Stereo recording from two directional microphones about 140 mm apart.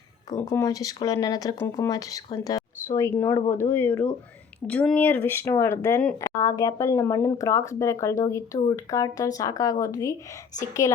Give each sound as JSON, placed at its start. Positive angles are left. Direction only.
{"t": 0.3, "sound": "a woman's voice", "side_deg": 20}